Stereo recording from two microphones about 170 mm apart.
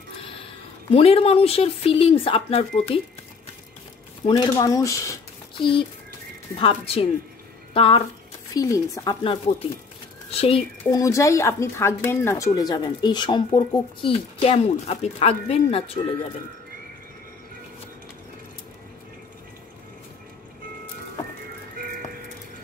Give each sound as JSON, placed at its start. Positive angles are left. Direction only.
{"t": 0.8, "sound": "speech", "side_deg": 35}
{"t": 4.3, "sound": "speech", "side_deg": 20}
{"t": 5.6, "sound": "speech", "side_deg": 30}
{"t": 8.5, "sound": "speech", "side_deg": 20}
{"t": 10.8, "sound": "speech", "side_deg": 20}